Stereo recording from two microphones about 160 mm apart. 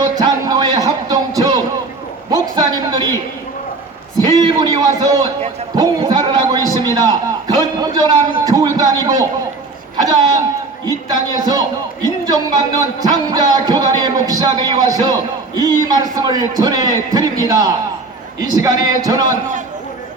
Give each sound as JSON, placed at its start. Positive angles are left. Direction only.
{"t": 0.0, "sound": "music", "side_deg": -25}
{"t": 1.4, "sound": "a sound", "side_deg": -25}
{"t": 2.3, "sound": "speech", "side_deg": -25}
{"t": 4.3, "sound": "speech", "side_deg": -25}
{"t": 10.8, "sound": "speech", "side_deg": -25}